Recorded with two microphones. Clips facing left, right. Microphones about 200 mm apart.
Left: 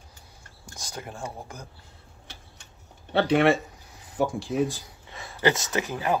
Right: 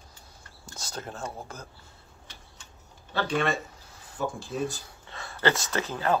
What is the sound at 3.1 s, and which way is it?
Speech, 65° left (ahead or behind).